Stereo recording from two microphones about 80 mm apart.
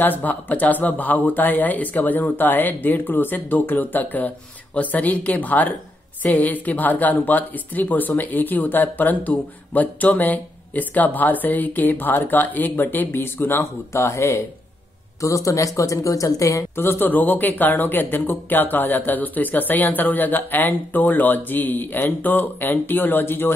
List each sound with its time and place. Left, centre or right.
0.0 s speech: left
16.7 s speech: left